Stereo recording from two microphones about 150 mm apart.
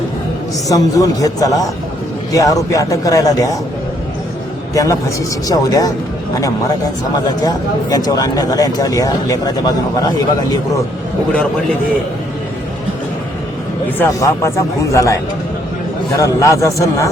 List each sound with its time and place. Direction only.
0.7 s speech: 25° left (ahead or behind)
4.7 s speech: 20° left (ahead or behind)
7.4 s speech: 25° left (ahead or behind)
14.0 s speech: 20° left (ahead or behind)